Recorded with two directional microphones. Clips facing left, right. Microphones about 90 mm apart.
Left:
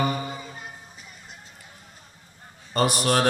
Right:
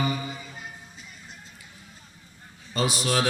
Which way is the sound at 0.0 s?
40° left (ahead or behind).